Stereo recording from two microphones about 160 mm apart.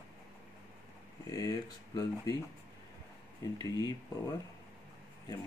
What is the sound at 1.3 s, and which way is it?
Speech, 25° left (ahead or behind).